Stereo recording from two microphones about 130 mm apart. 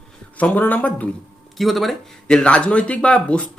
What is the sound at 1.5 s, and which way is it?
Speech, centre (ahead or behind).